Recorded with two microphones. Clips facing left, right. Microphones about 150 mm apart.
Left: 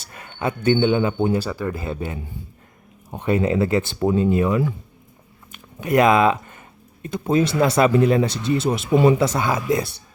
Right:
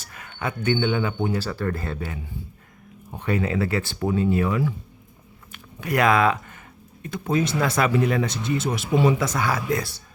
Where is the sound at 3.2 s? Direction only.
25° left (ahead or behind).